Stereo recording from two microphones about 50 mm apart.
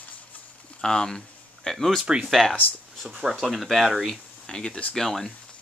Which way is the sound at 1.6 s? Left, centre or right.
Centre.